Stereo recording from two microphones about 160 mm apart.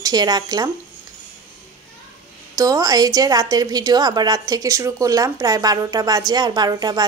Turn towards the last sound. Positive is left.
turn(degrees=-25)  # may be behind; listen again after turning